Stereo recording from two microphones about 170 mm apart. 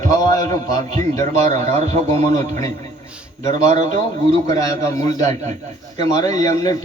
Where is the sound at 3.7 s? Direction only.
45° right (ahead or behind).